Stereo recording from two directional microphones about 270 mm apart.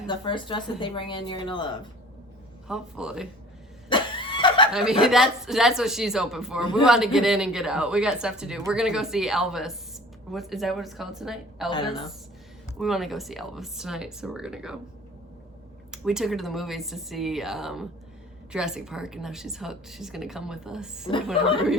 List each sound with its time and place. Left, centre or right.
0.1 s speech: centre
2.6 s speech: centre
3.8 s a sound: centre
4.7 s speech: centre
12.8 s speech: centre
15.9 s speech: centre